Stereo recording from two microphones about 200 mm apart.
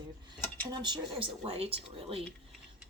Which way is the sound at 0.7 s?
20° right (ahead or behind).